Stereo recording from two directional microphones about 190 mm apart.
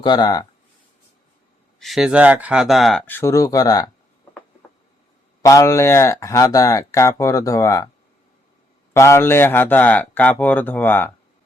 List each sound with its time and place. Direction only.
0.0 s speech: 25° left (ahead or behind)
1.8 s speech: centre (ahead or behind)
3.1 s speech: 15° left (ahead or behind)
5.4 s speech: 15° left (ahead or behind)
8.9 s speech: 15° left (ahead or behind)